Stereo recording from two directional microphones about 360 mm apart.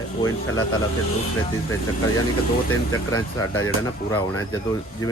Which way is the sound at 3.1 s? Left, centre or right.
Centre.